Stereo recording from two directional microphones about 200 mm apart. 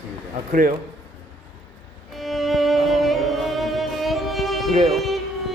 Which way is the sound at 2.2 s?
Centre (ahead or behind).